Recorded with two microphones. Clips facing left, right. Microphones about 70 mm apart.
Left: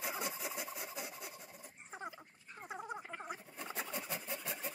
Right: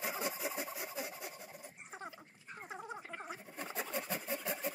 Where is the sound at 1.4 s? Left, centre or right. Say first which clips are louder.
Right 3 dB; centre.